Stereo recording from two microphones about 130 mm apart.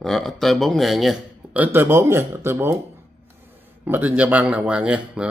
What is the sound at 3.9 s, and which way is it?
A man's voice, 15° right (ahead or behind).